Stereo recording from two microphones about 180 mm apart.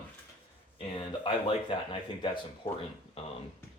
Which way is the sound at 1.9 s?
25° left (ahead or behind).